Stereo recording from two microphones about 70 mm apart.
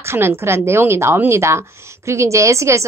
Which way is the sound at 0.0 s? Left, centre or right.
Right.